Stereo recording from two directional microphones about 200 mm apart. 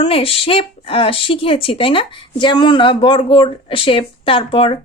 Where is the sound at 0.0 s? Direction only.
30° left (ahead or behind).